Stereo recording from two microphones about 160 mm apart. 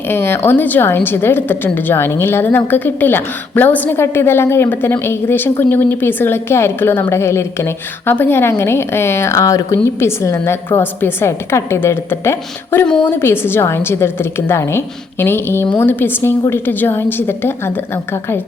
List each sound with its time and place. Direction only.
0.1 s a woman's voice: 15° left (ahead or behind)